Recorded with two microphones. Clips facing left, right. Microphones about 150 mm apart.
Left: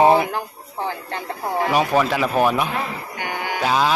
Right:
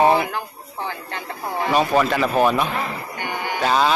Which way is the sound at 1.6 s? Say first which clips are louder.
Right 1 dB; 10° left (ahead or behind).